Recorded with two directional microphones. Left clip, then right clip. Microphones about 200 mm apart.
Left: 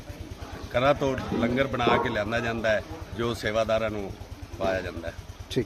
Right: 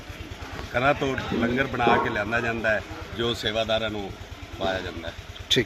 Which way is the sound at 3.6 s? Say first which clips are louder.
Left 1 dB; 5° left (ahead or behind).